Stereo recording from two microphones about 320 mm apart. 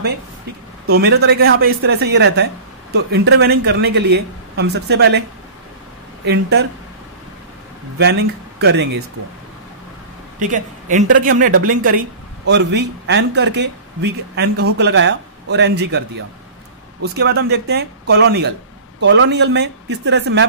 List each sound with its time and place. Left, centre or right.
0.8 s a man's voice: right
6.2 s a man's voice: right
8.0 s a man's voice: right
10.5 s a man's voice: right